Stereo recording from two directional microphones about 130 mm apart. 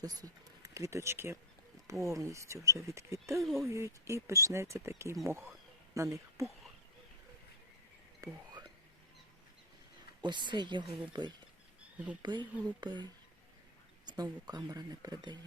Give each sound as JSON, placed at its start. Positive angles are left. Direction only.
{"t": 0.0, "sound": "speech", "side_deg": -30}
{"t": 3.4, "sound": "speech", "side_deg": 0}
{"t": 3.7, "sound": "speech", "side_deg": -25}
{"t": 8.2, "sound": "whispering", "side_deg": -35}
{"t": 10.2, "sound": "speech", "side_deg": -35}